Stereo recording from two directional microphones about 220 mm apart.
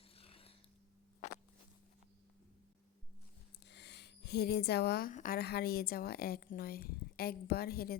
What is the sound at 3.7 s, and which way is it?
Speech, 50° left (ahead or behind).